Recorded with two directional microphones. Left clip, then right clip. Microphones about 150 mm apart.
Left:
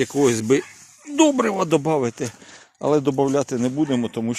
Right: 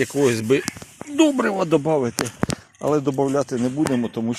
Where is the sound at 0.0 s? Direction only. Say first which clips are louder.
Even; 40° left (ahead or behind).